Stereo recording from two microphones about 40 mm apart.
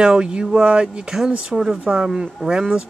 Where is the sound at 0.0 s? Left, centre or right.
Right.